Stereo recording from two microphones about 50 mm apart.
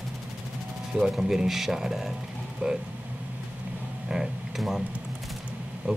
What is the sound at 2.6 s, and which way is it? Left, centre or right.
Speech, right.